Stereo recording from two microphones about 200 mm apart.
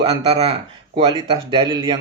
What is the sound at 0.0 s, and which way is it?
Speech, 30° right (ahead or behind).